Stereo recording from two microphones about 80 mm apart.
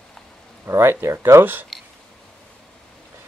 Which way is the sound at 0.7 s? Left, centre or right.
Right.